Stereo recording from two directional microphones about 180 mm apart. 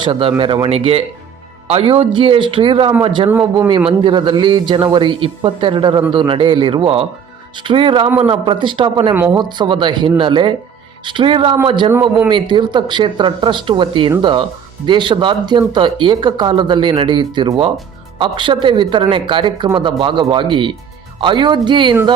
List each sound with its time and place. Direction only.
0.0 s a man's voice: 30° right (ahead or behind)
3.2 s speech: 10° right (ahead or behind)
3.7 s speech: 30° right (ahead or behind)